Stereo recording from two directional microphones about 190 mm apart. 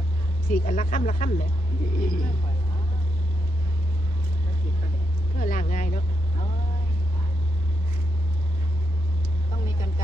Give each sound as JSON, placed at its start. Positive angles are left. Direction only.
{"t": 0.5, "sound": "speech", "side_deg": 45}
{"t": 5.3, "sound": "speech", "side_deg": 45}